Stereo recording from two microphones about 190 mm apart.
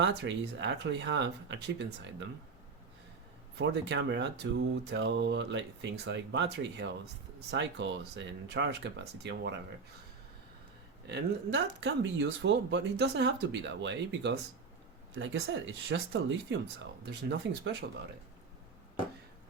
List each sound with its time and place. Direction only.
0.0 s speech: 65° right (ahead or behind)
3.6 s speech: 65° right (ahead or behind)
11.1 s speech: 65° right (ahead or behind)